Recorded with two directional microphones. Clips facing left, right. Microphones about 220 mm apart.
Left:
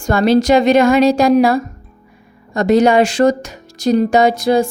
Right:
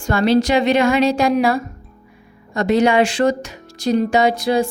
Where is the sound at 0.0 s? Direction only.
45° left (ahead or behind).